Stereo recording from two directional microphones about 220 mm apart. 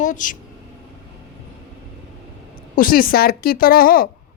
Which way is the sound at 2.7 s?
40° left (ahead or behind).